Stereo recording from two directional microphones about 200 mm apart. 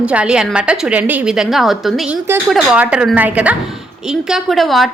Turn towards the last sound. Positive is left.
turn(degrees=0)  # may be behind; listen again after turning